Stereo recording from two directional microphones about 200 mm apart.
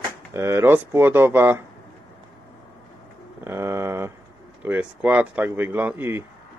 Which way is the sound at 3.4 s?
15° right (ahead or behind).